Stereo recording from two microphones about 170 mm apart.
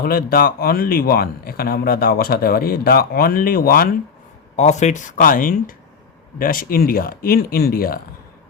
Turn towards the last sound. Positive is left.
turn(degrees=60)  # may be behind; listen again after turning